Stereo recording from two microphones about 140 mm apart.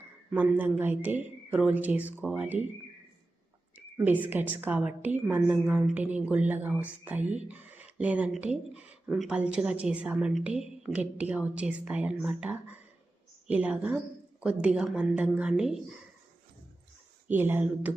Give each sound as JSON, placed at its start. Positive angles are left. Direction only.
{"t": 0.3, "sound": "speech", "side_deg": -10}
{"t": 3.9, "sound": "speech", "side_deg": -10}
{"t": 17.2, "sound": "speech", "side_deg": -15}